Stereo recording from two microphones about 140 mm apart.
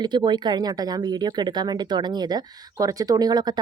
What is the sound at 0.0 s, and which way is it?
Speech, 30° right (ahead or behind).